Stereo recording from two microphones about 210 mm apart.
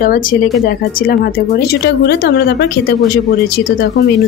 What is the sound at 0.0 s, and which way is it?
Speech, 45° left (ahead or behind).